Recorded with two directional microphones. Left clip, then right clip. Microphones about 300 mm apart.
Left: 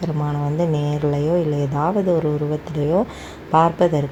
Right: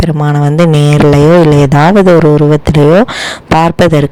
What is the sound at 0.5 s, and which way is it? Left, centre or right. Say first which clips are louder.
A man's voice: right 14 dB; right.